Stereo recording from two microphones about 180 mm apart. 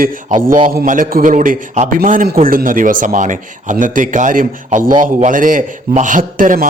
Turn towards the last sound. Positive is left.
turn(degrees=-50)  # may be behind; listen again after turning